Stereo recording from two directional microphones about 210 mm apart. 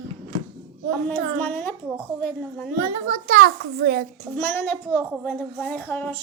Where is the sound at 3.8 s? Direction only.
45° right (ahead or behind).